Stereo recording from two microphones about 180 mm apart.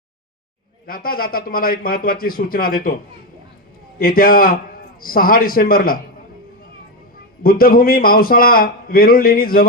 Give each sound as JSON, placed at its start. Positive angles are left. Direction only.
{"t": 0.9, "sound": "a man's voice", "side_deg": 55}
{"t": 3.9, "sound": "a man's voice", "side_deg": 55}
{"t": 7.4, "sound": "a man's voice", "side_deg": 55}